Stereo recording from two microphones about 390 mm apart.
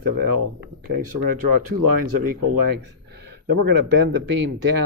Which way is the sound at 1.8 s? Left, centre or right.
Right.